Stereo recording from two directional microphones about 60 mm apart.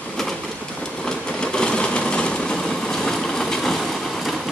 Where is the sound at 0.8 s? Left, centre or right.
Centre.